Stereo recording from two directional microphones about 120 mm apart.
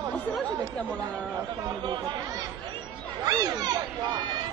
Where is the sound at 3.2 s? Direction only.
30° right (ahead or behind).